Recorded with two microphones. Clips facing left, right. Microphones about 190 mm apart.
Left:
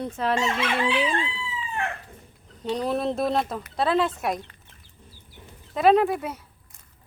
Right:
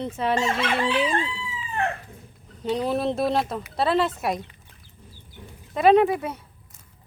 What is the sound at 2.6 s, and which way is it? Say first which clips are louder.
Speech: right 1 dB; centre (ahead or behind).